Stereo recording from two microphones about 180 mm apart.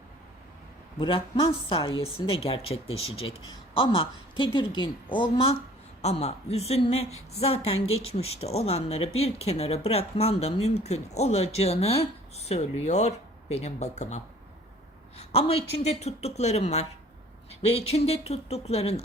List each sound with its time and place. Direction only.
0.9 s a woman's voice: 25° left (ahead or behind)
15.2 s a woman's voice: 35° left (ahead or behind)